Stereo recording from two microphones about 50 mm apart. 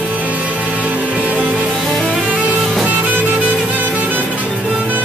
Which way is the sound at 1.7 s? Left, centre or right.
Centre.